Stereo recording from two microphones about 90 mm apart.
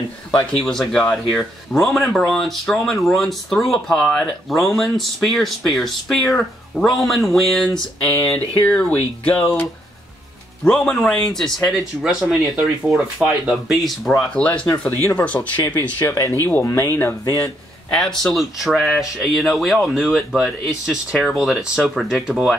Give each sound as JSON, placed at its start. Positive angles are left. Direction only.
{"t": 0.5, "sound": "speech", "side_deg": 5}
{"t": 8.0, "sound": "speech", "side_deg": 15}
{"t": 12.0, "sound": "speech", "side_deg": -5}
{"t": 14.3, "sound": "speech", "side_deg": 15}
{"t": 16.6, "sound": "speech", "side_deg": 35}
{"t": 17.9, "sound": "speech", "side_deg": 5}